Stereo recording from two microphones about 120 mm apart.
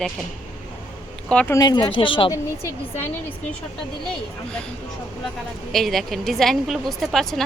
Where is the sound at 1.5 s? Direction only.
35° left (ahead or behind).